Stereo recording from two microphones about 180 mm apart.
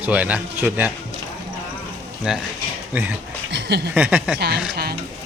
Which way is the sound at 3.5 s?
70° right (ahead or behind).